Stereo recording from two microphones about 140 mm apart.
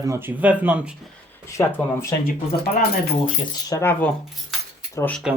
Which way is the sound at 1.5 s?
20° left (ahead or behind).